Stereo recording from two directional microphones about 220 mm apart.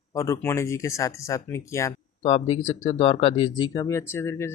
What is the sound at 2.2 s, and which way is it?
Speech, 25° left (ahead or behind).